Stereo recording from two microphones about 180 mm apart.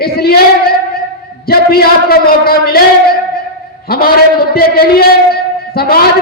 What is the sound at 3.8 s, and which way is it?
A man's voice, 60° left (ahead or behind).